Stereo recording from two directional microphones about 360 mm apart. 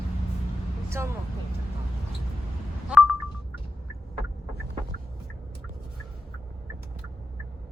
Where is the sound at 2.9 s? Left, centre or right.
Centre.